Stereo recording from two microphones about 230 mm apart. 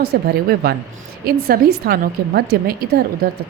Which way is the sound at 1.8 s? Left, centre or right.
Right.